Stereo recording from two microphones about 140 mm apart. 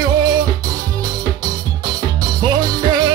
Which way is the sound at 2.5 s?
30° right (ahead or behind).